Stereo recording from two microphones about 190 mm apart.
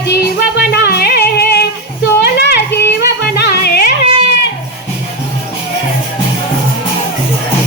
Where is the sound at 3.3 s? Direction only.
60° left (ahead or behind).